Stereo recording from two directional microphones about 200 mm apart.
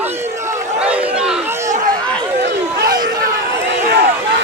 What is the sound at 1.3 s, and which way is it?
Chatter, 10° right (ahead or behind).